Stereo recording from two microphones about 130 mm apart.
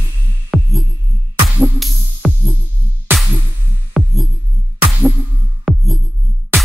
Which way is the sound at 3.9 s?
Centre (ahead or behind).